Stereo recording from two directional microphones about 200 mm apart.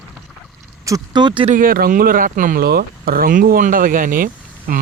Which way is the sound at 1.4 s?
45° right (ahead or behind).